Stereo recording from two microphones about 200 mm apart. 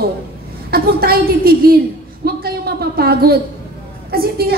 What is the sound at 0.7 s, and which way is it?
A woman's voice, 50° right (ahead or behind).